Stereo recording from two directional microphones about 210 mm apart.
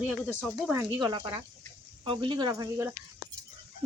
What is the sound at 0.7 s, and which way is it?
Speech, 20° right (ahead or behind).